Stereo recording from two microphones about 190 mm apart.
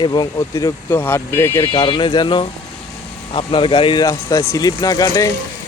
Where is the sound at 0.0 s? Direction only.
20° left (ahead or behind).